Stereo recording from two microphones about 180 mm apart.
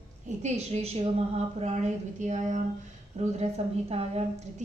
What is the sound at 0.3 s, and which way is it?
A woman's voice, 40° right (ahead or behind).